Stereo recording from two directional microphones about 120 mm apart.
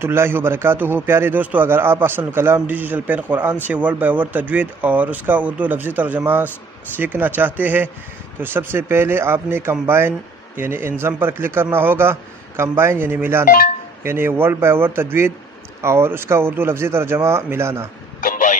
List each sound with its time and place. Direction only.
0.0 s a man's voice: 20° right (ahead or behind)